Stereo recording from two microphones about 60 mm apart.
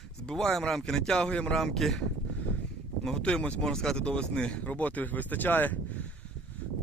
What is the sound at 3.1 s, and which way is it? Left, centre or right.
Speech, centre.